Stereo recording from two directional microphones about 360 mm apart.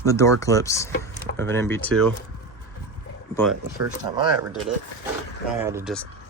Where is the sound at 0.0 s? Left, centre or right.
Centre.